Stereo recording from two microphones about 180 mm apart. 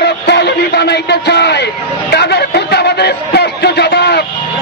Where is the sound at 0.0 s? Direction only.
70° left (ahead or behind).